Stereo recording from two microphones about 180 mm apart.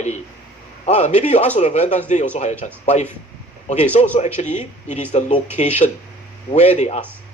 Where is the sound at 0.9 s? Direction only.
40° left (ahead or behind).